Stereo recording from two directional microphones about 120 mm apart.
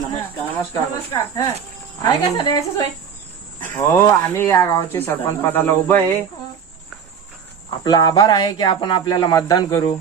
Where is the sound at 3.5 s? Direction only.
20° left (ahead or behind).